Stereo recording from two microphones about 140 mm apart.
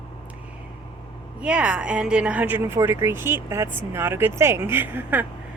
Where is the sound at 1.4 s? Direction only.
10° right (ahead or behind).